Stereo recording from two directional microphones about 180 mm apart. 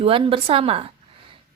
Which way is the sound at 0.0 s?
30° right (ahead or behind).